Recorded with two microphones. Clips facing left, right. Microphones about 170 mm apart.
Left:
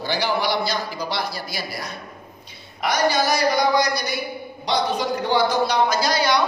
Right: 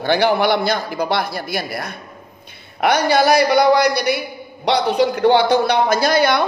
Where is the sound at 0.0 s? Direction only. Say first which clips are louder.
Right 7 dB; 60° right (ahead or behind).